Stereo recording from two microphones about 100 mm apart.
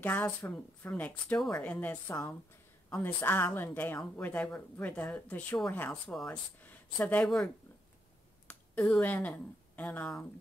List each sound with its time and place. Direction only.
0.0 s a woman's voice: 15° left (ahead or behind)
6.0 s a woman's voice: 5° left (ahead or behind)
8.5 s a sound: 15° left (ahead or behind)
9.0 s a woman's voice: 20° left (ahead or behind)